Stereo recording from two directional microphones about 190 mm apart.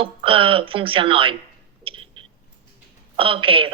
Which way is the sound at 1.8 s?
30° right (ahead or behind).